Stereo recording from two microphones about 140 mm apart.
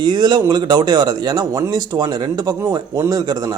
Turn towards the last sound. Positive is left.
turn(degrees=-30)  # may be behind; listen again after turning